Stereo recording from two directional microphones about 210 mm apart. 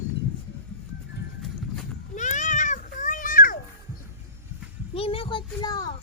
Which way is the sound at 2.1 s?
35° left (ahead or behind).